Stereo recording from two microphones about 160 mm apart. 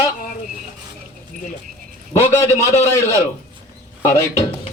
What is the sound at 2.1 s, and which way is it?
A man's voice, 15° left (ahead or behind).